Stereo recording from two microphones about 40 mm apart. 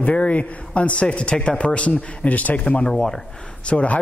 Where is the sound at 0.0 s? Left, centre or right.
Left.